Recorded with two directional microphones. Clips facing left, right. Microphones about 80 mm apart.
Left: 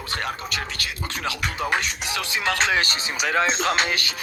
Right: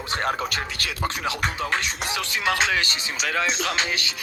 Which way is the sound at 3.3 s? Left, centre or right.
Left.